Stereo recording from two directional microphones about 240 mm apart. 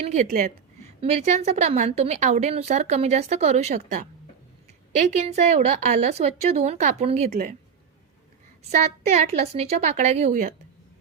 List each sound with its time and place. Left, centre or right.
0.0 s a woman's voice: right
9.0 s a woman's voice: right